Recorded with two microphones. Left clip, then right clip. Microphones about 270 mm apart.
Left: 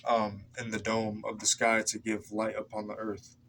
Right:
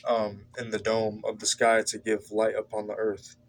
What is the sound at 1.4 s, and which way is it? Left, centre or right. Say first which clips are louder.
Speech: right 4 dB; left.